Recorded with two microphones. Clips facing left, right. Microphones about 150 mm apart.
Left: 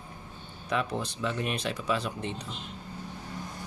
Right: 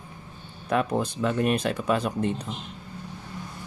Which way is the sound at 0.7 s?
50° right (ahead or behind).